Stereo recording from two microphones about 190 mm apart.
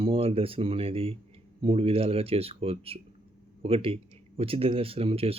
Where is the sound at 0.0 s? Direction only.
30° right (ahead or behind).